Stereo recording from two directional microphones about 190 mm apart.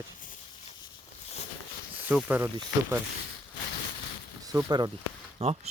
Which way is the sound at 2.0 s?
10° right (ahead or behind).